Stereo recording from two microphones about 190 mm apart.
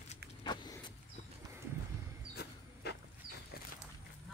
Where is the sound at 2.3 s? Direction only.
60° left (ahead or behind).